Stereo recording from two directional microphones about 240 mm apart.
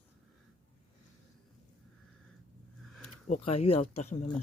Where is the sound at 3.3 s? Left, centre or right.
Left.